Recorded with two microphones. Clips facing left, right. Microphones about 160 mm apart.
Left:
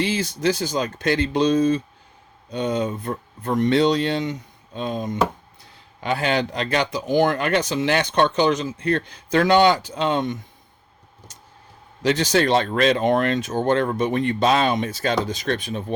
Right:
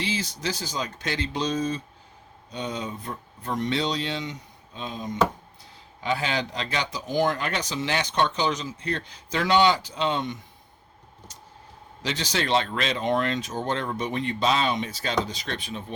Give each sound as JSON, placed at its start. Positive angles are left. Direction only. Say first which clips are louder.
{"t": 0.0, "sound": "speech", "louder": "left 8 dB", "side_deg": 55}
{"t": 12.0, "sound": "speech", "louder": "left 9 dB", "side_deg": 50}